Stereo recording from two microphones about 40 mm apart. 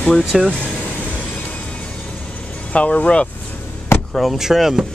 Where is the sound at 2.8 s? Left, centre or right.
Left.